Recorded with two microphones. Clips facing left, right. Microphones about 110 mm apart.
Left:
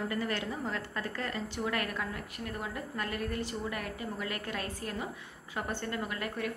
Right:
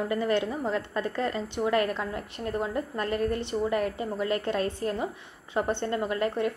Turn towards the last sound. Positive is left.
turn(degrees=-25)  # may be behind; listen again after turning